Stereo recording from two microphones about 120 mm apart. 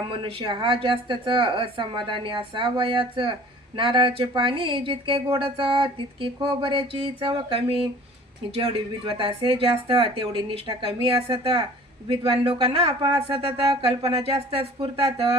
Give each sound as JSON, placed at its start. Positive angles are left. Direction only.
{"t": 0.1, "sound": "speech", "side_deg": -50}
{"t": 12.3, "sound": "speech", "side_deg": -50}
{"t": 13.0, "sound": "speech", "side_deg": -35}
{"t": 13.3, "sound": "speech", "side_deg": -50}